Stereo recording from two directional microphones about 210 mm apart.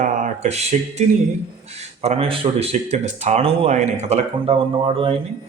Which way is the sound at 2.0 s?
25° right (ahead or behind).